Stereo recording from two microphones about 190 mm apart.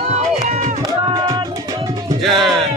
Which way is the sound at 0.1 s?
40° right (ahead or behind).